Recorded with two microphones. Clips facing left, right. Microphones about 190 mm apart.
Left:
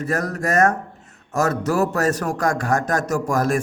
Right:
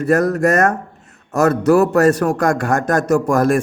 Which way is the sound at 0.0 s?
60° right (ahead or behind).